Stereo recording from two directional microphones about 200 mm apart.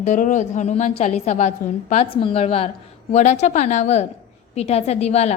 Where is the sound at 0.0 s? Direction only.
40° left (ahead or behind).